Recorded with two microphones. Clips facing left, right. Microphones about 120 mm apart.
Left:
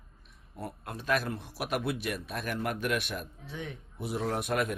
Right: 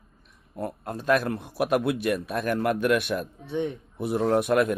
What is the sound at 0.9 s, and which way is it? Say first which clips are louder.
Speech: right 7 dB; 45° right (ahead or behind).